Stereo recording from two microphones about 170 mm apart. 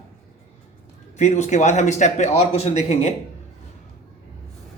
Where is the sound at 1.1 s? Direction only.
45° left (ahead or behind).